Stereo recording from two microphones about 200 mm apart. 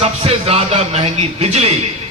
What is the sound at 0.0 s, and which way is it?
A man's voice, 30° right (ahead or behind).